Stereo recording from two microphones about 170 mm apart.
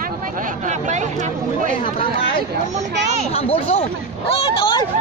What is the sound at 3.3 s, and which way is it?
Speech, 35° left (ahead or behind).